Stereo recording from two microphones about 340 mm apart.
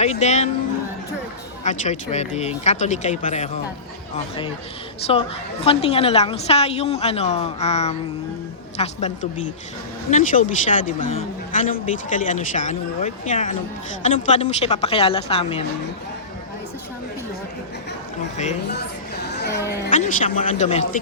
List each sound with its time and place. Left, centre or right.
0.0 s a man's voice: centre
1.6 s a man's voice: centre
18.3 s a man's voice: centre
19.3 s a sound: left
19.9 s a man's voice: left